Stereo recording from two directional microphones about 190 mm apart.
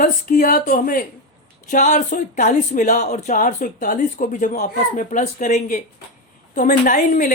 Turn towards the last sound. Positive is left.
turn(degrees=45)  # may be behind; listen again after turning